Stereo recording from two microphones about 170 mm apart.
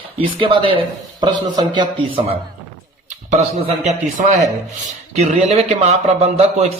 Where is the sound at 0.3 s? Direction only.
30° right (ahead or behind).